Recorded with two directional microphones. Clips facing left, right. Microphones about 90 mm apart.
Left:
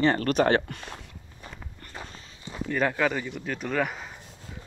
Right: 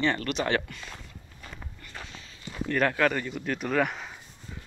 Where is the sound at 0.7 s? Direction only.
50° left (ahead or behind).